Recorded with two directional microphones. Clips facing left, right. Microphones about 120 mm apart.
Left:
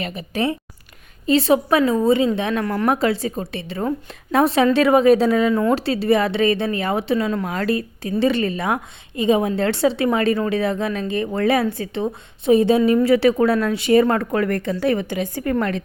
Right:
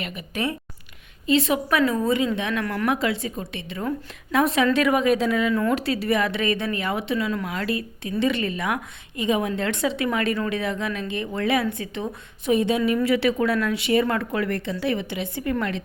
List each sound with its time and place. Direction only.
0.0 s a woman's voice: 30° left (ahead or behind)